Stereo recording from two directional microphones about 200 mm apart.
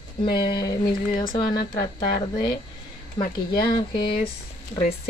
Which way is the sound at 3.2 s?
20° left (ahead or behind).